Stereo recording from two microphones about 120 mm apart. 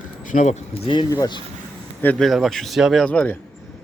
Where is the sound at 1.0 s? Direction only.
35° left (ahead or behind).